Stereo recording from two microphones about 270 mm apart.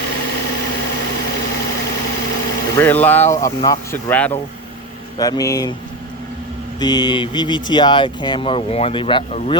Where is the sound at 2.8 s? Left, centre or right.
Centre.